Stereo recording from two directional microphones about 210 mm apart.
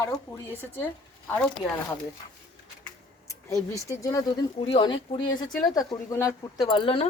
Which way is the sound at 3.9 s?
15° left (ahead or behind).